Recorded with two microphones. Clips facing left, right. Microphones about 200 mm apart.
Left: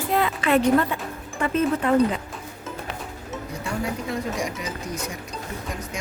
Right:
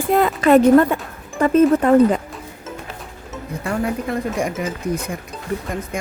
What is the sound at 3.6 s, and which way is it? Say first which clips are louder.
Speech: right 7 dB; 55° right (ahead or behind).